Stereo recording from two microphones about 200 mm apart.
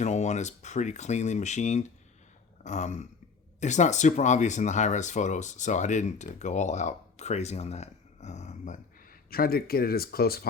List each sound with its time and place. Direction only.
0.0 s speech: 35° left (ahead or behind); by 10.4 s 50° left (ahead or behind)